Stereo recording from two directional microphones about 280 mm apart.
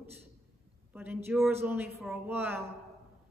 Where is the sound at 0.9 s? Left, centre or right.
Centre.